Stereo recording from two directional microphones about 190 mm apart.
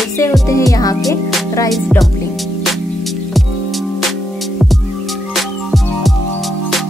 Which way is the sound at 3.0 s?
Centre (ahead or behind).